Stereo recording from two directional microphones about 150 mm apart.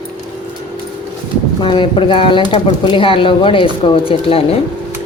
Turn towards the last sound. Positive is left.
turn(degrees=40)  # may be behind; listen again after turning